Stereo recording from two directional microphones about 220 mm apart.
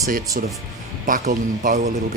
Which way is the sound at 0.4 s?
40° right (ahead or behind).